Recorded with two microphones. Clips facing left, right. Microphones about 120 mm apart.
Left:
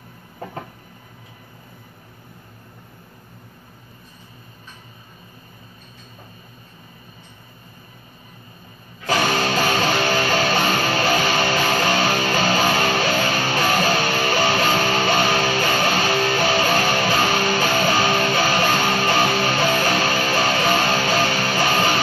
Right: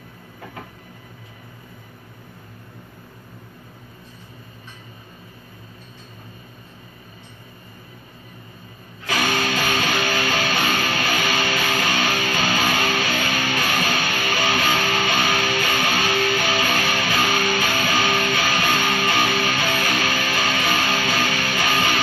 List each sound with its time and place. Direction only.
9.0 s music: 35° left (ahead or behind)